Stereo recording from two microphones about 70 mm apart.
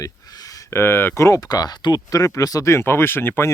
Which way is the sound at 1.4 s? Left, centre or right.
Left.